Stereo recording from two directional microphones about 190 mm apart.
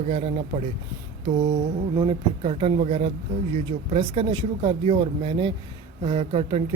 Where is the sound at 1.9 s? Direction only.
20° right (ahead or behind).